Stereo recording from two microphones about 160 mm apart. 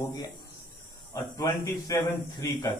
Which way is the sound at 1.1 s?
25° left (ahead or behind).